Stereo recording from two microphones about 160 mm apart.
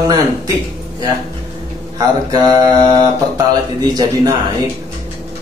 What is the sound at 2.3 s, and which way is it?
Speech, 25° right (ahead or behind).